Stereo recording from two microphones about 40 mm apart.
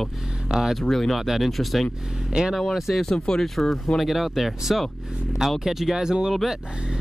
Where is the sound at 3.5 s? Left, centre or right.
Centre.